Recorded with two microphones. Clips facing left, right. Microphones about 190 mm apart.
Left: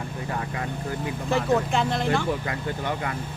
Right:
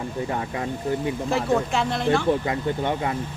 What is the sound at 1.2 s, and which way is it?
Speech, centre (ahead or behind).